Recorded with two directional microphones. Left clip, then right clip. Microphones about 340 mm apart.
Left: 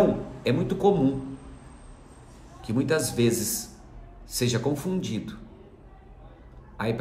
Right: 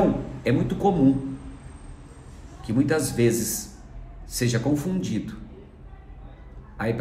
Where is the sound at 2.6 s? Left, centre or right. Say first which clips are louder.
Right 2 dB; centre.